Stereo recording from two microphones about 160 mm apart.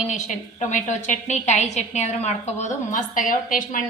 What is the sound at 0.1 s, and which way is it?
A woman's voice, 50° left (ahead or behind).